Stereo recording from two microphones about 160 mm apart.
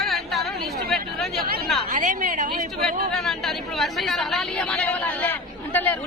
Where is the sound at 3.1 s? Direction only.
Centre (ahead or behind).